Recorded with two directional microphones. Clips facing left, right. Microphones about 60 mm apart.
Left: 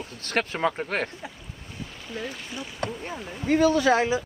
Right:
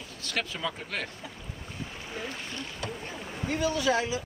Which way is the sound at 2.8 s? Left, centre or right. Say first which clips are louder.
Left 8 dB; left.